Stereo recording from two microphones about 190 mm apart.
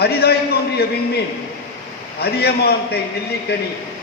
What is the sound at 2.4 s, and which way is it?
Speech, 60° left (ahead or behind).